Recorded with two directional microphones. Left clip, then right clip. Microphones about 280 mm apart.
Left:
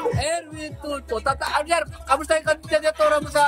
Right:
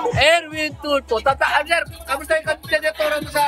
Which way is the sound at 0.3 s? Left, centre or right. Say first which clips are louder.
Right 10 dB; centre.